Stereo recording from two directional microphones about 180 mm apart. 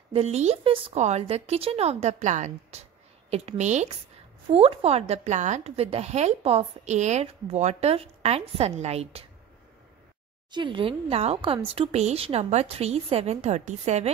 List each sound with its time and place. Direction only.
0.1 s a woman's voice: 35° right (ahead or behind)
10.5 s a woman's voice: 25° right (ahead or behind)